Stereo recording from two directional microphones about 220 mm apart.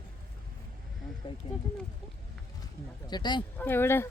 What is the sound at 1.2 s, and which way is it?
Speech, 20° left (ahead or behind).